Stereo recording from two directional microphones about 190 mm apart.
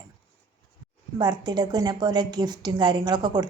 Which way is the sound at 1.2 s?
20° right (ahead or behind).